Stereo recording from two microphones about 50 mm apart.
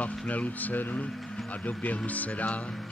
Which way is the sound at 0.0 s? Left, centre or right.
Left.